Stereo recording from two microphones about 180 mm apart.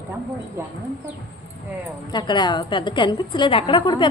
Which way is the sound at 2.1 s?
25° left (ahead or behind).